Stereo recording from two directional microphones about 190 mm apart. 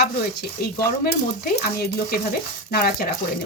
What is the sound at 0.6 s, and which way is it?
Speech, 55° left (ahead or behind).